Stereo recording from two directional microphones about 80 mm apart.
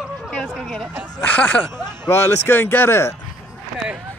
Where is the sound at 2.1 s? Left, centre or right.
Left.